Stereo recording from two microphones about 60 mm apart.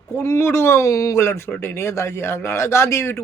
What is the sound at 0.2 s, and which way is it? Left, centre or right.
Speech, left.